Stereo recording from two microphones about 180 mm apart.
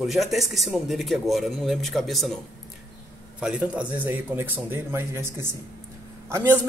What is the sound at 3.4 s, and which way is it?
A man's voice, 5° right (ahead or behind).